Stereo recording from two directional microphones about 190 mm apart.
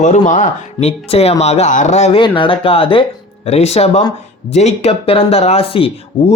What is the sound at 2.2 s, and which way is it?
Speech, 25° left (ahead or behind).